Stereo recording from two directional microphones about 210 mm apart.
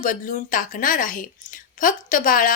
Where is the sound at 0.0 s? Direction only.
40° left (ahead or behind).